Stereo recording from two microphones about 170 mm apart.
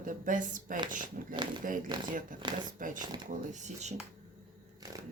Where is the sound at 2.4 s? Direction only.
25° right (ahead or behind).